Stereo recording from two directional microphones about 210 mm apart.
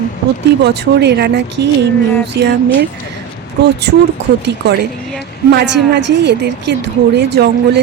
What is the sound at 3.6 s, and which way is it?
A woman's voice, 50° right (ahead or behind).